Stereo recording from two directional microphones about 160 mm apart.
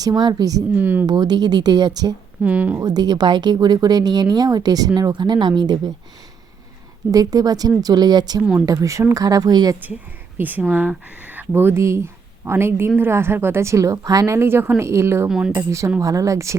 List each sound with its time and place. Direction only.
0.0 s speech: 25° right (ahead or behind)
0.7 s a woman's voice: 10° right (ahead or behind)
1.0 s speech: 25° right (ahead or behind)
2.4 s a woman's voice: 10° right (ahead or behind)
2.8 s speech: 25° right (ahead or behind)
7.1 s speech: 25° right (ahead or behind)
9.8 s a woman's voice: 10° right (ahead or behind)
15.3 s speech: 5° right (ahead or behind)
15.5 s speech: 20° right (ahead or behind)